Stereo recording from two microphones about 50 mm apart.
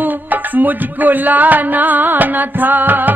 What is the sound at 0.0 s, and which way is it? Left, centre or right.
Music, right.